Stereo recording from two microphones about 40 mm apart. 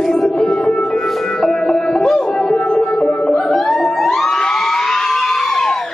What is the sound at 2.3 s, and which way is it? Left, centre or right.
Music, left.